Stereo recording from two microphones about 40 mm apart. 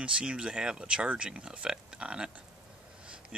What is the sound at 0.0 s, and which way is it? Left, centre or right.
Speech, right.